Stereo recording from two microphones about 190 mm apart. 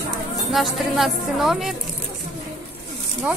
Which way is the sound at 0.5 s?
Centre (ahead or behind).